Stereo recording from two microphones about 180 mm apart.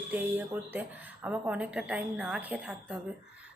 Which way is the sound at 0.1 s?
10° right (ahead or behind).